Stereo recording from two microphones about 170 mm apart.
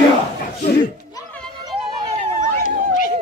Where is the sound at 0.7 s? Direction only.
65° left (ahead or behind).